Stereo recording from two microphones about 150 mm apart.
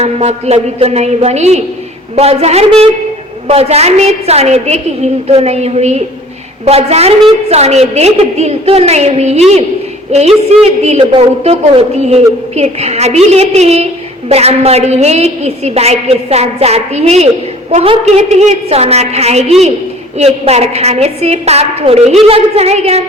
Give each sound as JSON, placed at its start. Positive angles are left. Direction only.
{"t": 0.0, "sound": "a woman's voice", "side_deg": -45}